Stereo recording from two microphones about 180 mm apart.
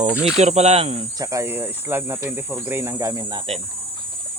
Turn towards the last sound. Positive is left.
turn(degrees=-20)  # may be behind; listen again after turning